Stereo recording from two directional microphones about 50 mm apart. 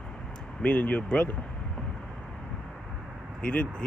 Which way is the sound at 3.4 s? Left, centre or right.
Left.